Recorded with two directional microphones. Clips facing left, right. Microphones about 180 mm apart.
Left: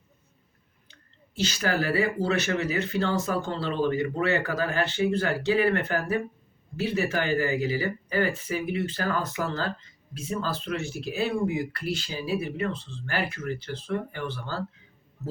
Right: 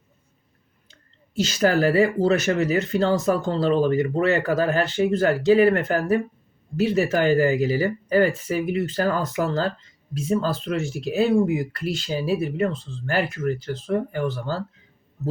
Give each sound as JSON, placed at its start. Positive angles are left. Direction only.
{"t": 1.4, "sound": "speech", "side_deg": -40}